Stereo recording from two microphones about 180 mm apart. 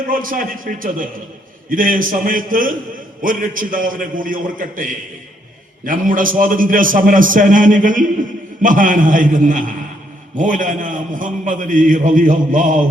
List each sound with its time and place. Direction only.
0.1 s a man's voice: 50° right (ahead or behind)